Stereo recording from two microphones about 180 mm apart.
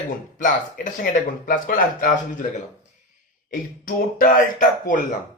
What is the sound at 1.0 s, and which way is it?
Speech, 50° left (ahead or behind).